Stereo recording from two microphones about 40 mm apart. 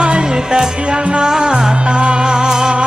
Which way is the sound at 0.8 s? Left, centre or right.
Right.